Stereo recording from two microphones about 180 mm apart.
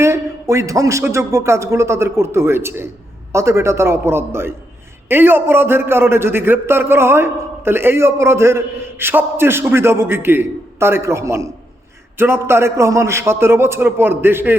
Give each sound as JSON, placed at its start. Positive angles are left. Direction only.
{"t": 0.0, "sound": "a man's voice", "side_deg": -15}